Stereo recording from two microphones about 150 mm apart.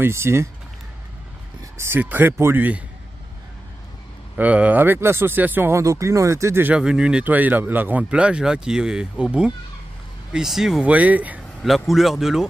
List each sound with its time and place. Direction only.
0.0 s speech: 15° right (ahead or behind)
1.8 s speech: 15° right (ahead or behind)
4.4 s speech: 10° right (ahead or behind)